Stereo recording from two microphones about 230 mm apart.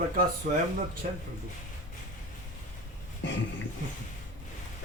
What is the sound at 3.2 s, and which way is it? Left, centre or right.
Dog, left.